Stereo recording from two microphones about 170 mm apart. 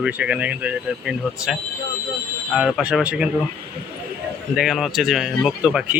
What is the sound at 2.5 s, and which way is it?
Speech, centre (ahead or behind).